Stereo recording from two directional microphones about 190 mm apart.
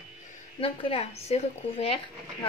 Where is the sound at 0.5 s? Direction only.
30° left (ahead or behind).